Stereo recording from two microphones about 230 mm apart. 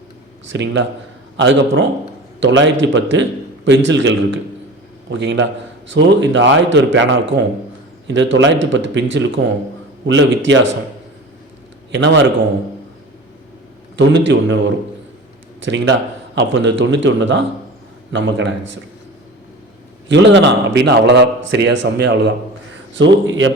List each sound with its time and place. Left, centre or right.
0.5 s a man's voice: right
11.9 s a man's voice: right
13.9 s a man's voice: right
20.1 s a man's voice: right